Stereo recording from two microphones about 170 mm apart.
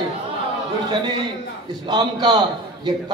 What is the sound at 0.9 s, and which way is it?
A man's voice, 25° right (ahead or behind).